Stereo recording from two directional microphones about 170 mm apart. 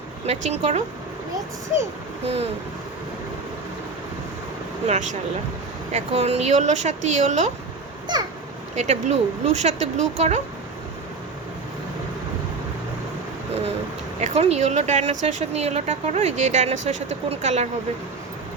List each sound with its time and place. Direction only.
0.3 s speech: 40° right (ahead or behind)
2.2 s speech: 35° right (ahead or behind)
4.9 s speech: 45° right (ahead or behind)
8.1 s a sound: 25° right (ahead or behind)
8.7 s speech: 45° right (ahead or behind)
14.2 s speech: 40° right (ahead or behind)